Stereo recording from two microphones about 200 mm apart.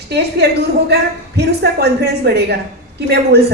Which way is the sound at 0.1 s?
55° right (ahead or behind).